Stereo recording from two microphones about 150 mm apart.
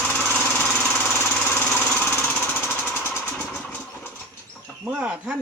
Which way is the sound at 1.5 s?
15° left (ahead or behind).